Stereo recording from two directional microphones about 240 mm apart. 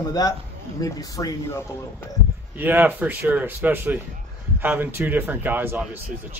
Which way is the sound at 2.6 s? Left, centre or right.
Centre.